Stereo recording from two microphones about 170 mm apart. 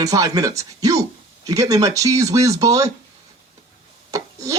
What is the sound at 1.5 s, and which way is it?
Speech, 20° right (ahead or behind).